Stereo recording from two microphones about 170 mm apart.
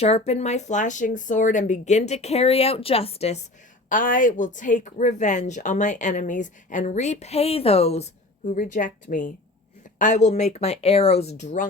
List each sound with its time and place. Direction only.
0.0 s speech: 40° left (ahead or behind)
3.8 s a woman's voice: 50° left (ahead or behind)